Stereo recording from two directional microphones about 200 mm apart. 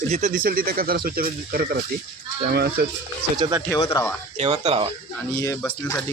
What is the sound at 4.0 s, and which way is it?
Speech, 15° left (ahead or behind).